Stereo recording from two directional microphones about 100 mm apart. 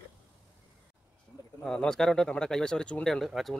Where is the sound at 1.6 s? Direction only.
5° left (ahead or behind).